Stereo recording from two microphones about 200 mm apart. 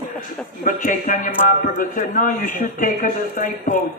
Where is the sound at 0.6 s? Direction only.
40° left (ahead or behind).